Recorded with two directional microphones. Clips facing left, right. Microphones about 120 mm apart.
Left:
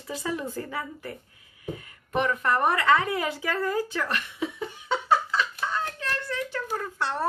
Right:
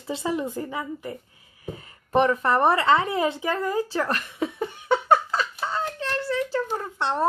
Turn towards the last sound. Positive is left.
turn(degrees=-25)  # may be behind; listen again after turning